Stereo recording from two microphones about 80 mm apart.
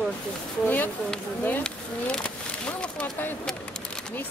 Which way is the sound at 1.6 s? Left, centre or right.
Centre.